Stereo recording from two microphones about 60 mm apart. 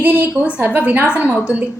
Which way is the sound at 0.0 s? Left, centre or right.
Right.